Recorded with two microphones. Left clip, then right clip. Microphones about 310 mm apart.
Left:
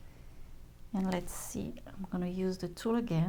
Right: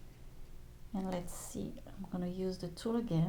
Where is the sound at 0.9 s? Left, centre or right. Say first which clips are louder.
Left 4 dB; left.